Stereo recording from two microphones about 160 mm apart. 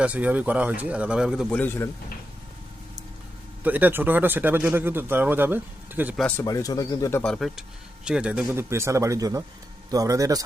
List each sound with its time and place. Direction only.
0.0 s speech: 10° right (ahead or behind)
1.5 s a man's voice: 10° left (ahead or behind)
3.6 s speech: 10° right (ahead or behind)
6.1 s a man's voice: 5° left (ahead or behind)
6.4 s speech: 20° left (ahead or behind)
7.2 s a man's voice: 5° left (ahead or behind); by 10.4 s 20° right (ahead or behind)